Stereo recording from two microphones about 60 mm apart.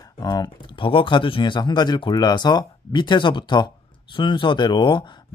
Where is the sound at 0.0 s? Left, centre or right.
Left.